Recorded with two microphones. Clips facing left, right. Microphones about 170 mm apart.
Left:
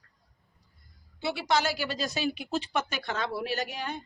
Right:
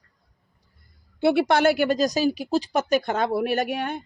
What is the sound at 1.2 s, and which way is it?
Speech, 55° right (ahead or behind).